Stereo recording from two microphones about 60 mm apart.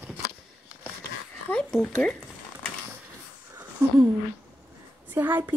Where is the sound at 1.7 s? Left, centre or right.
Centre.